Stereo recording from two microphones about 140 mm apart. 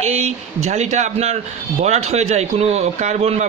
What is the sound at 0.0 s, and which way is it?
A man's voice, 50° right (ahead or behind).